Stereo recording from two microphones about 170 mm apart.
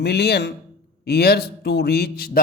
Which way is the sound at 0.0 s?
75° left (ahead or behind).